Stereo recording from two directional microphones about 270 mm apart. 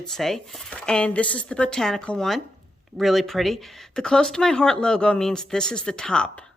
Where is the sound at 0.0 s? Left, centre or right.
Centre.